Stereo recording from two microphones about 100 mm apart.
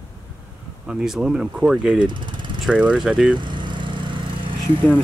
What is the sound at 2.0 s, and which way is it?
Speech, 50° right (ahead or behind).